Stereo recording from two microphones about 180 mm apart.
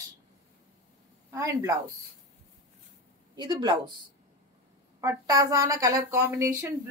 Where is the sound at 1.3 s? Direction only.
15° right (ahead or behind).